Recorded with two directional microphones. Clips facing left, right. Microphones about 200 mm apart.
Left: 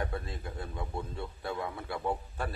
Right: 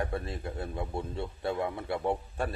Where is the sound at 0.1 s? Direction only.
25° right (ahead or behind).